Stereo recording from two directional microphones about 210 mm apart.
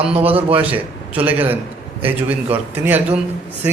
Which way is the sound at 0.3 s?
25° right (ahead or behind).